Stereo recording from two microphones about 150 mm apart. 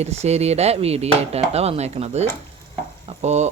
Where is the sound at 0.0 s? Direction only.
45° right (ahead or behind).